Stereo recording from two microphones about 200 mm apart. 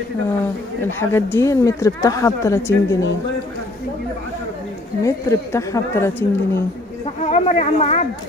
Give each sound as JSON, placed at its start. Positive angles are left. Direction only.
{"t": 0.9, "sound": "a woman's voice", "side_deg": 10}
{"t": 5.0, "sound": "a woman's voice", "side_deg": 15}
{"t": 7.2, "sound": "speech", "side_deg": 35}